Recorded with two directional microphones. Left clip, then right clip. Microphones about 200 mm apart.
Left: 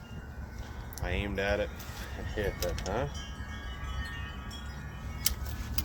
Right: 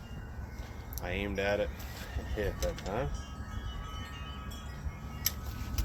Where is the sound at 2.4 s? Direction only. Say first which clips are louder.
Left 1 dB; 5° left (ahead or behind).